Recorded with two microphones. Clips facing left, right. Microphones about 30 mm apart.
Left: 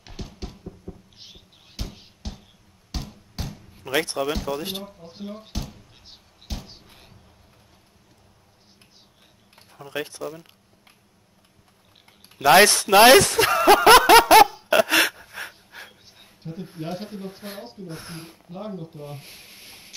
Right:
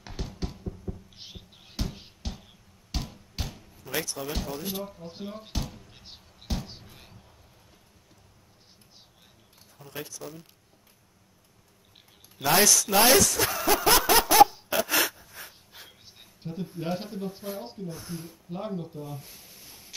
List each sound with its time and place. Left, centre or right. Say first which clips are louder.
0.0 s computer keyboard: right 1 dB; centre
1.1 s a sound: even; centre
2.9 s music: left 1 dB; centre
3.7 s speech: left 9 dB; left
5.0 s a sound: left 2 dB; centre
9.6 s speech: left 9 dB; left
12.4 s speech: left 8 dB; left
14.7 s gasp: left 8 dB; left
16.4 s speech: left 1 dB; centre
17.4 s speech: right 1 dB; left
18.9 s a sound: left 1 dB; left